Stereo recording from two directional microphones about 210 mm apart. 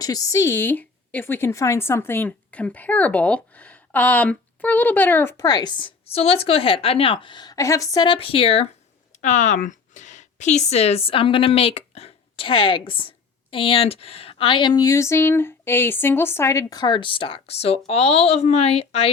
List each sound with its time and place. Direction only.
0.0 s a woman's voice: 15° left (ahead or behind)